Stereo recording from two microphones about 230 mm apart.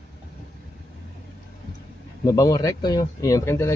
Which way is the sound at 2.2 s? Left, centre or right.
Centre.